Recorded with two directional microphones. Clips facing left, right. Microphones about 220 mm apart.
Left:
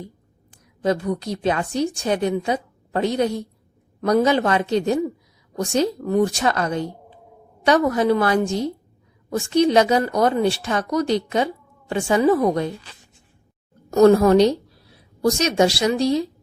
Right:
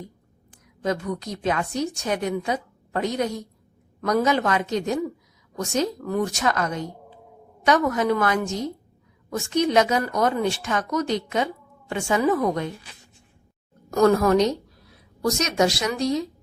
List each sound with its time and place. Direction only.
0.8 s a woman's voice: 30° left (ahead or behind)
13.9 s a woman's voice: 25° left (ahead or behind)